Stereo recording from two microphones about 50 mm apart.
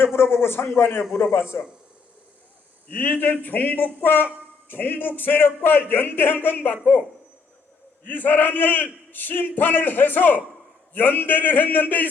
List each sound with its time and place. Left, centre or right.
0.0 s a man's voice: left
2.9 s a man's voice: left
8.1 s a man's voice: left